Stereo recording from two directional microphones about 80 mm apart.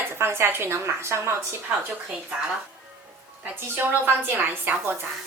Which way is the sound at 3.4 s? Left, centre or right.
Right.